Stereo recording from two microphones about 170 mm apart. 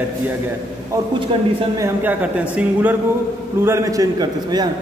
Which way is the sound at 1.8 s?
10° right (ahead or behind).